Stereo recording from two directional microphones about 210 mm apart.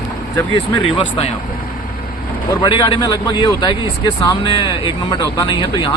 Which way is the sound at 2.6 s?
20° left (ahead or behind).